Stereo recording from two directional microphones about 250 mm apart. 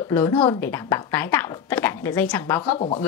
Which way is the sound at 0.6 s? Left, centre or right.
Centre.